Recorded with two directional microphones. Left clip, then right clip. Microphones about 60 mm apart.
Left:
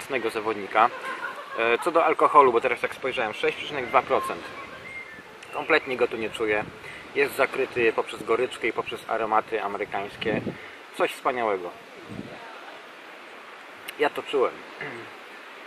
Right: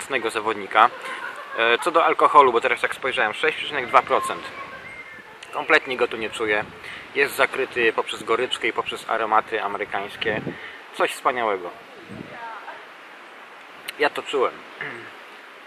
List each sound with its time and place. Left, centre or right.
0.1 s speech: centre
5.5 s speech: centre
8.7 s speech: right
13.8 s speech: centre